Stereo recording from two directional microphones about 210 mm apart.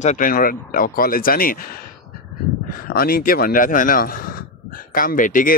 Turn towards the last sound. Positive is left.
turn(degrees=40)  # may be behind; listen again after turning